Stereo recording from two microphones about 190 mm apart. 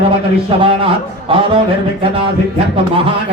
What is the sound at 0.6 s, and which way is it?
Speech, 30° right (ahead or behind).